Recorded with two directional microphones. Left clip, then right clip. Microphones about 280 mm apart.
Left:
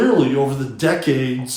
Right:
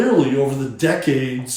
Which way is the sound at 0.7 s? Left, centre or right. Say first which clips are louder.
Left 1 dB; centre.